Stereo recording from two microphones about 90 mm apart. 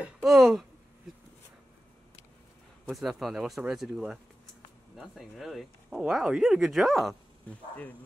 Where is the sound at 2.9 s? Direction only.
Centre (ahead or behind).